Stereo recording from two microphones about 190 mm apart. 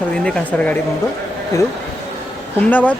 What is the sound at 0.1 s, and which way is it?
Speech, 5° left (ahead or behind).